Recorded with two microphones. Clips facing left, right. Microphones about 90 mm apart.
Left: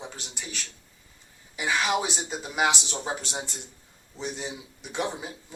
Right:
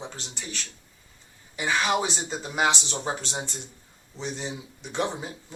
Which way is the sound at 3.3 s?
20° right (ahead or behind).